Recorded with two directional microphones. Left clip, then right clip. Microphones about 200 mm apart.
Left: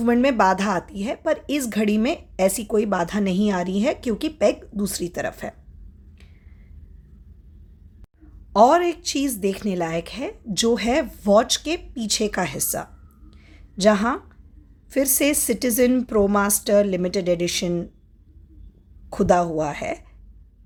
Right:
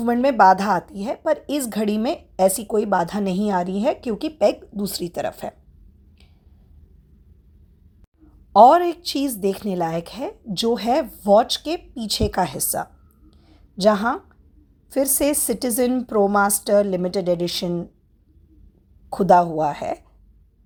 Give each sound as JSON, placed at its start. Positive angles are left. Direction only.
{"t": 0.0, "sound": "speech", "side_deg": -5}
{"t": 3.4, "sound": "a woman's voice", "side_deg": 15}
{"t": 4.0, "sound": "speech", "side_deg": 0}
{"t": 8.5, "sound": "a woman's voice", "side_deg": -5}
{"t": 13.4, "sound": "a sound", "side_deg": -5}
{"t": 14.8, "sound": "speech", "side_deg": -5}
{"t": 19.1, "sound": "speech", "side_deg": -5}